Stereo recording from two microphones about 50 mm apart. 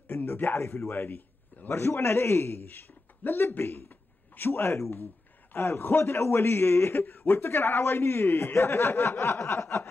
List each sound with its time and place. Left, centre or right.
0.1 s a man's voice: left
0.6 s a man's voice: left
2.9 s a sound: left
3.4 s a man's voice: left
9.4 s a man's voice: left